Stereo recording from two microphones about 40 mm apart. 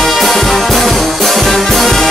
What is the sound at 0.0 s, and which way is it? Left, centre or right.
Brass instrument, centre.